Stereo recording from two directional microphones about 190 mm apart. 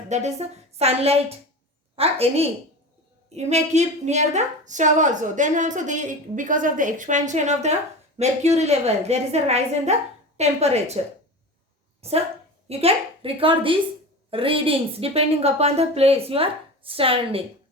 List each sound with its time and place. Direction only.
0.1 s a woman's voice: 35° right (ahead or behind)
12.0 s a woman's voice: 30° right (ahead or behind)